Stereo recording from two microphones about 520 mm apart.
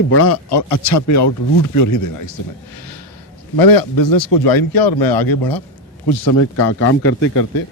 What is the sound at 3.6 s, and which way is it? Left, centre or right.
Speech, left.